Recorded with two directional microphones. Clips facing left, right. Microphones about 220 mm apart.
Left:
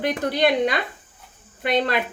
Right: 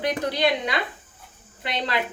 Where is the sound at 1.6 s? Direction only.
55° left (ahead or behind).